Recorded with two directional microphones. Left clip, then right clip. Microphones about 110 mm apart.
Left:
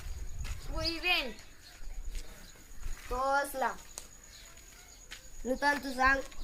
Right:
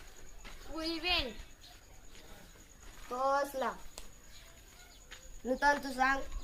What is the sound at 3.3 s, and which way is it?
Speech, 15° right (ahead or behind).